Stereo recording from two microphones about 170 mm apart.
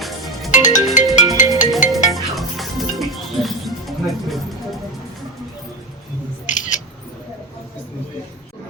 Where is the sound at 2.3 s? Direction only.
Centre (ahead or behind).